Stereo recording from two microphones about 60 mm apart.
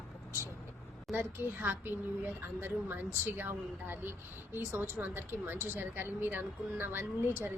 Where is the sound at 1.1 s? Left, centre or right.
Right.